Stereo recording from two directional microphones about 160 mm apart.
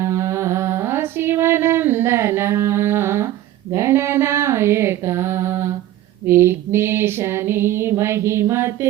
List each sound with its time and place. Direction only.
0.0 s music: 15° right (ahead or behind)
3.7 s mantra: 15° right (ahead or behind)
6.2 s a sound: 15° right (ahead or behind)